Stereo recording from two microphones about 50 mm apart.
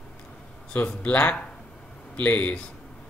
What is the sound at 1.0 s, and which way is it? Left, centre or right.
A man's voice, left.